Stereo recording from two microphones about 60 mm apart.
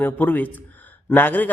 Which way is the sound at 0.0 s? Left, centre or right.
Left.